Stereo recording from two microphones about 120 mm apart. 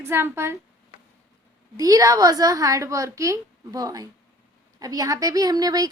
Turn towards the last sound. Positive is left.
turn(degrees=-35)  # may be behind; listen again after turning